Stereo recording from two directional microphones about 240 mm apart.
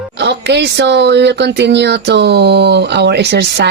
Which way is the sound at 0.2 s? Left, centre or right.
Right.